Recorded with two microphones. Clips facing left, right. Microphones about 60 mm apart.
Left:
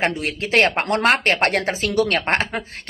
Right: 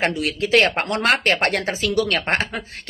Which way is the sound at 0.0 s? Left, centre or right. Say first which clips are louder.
Right 1 dB; left.